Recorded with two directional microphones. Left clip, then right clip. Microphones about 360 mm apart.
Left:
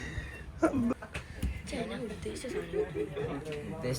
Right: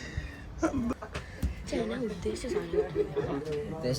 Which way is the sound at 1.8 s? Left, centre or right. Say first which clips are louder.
Right 5 dB; right.